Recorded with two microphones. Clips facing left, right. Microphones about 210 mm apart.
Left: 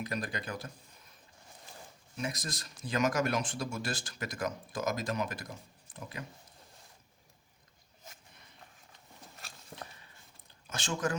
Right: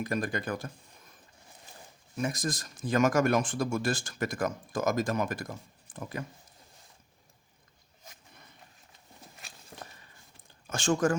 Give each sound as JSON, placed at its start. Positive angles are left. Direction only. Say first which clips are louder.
{"t": 0.0, "sound": "speech", "louder": "right 6 dB", "side_deg": -50}
{"t": 2.1, "sound": "speech", "louder": "right 6 dB", "side_deg": -50}
{"t": 10.7, "sound": "speech", "louder": "right 7 dB", "side_deg": -50}